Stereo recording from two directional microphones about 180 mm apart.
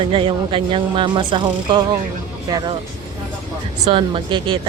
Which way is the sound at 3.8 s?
30° right (ahead or behind).